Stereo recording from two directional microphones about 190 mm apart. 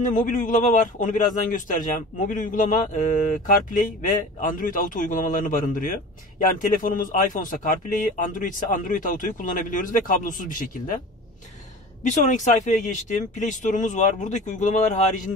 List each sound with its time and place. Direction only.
0.0 s a man's voice: 45° left (ahead or behind)
12.0 s speech: 40° left (ahead or behind)